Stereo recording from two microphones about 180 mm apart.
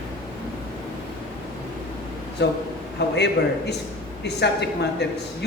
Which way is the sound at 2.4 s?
70° left (ahead or behind).